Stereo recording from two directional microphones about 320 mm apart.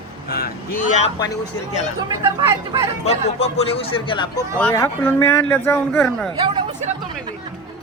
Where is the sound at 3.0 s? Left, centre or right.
Centre.